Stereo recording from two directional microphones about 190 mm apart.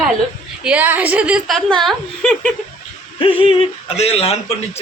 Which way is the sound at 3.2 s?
30° left (ahead or behind).